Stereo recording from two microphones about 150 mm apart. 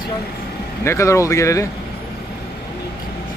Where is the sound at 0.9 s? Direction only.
20° left (ahead or behind).